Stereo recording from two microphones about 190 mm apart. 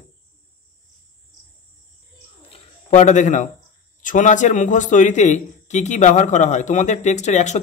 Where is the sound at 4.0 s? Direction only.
40° left (ahead or behind).